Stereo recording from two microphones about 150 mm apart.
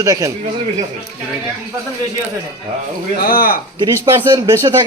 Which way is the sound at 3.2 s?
75° left (ahead or behind).